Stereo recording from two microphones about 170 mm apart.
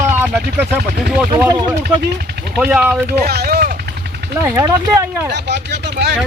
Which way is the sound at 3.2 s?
70° right (ahead or behind).